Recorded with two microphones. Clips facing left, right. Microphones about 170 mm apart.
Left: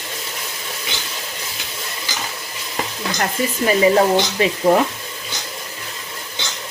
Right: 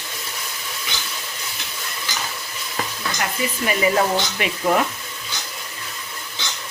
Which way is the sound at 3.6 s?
30° left (ahead or behind).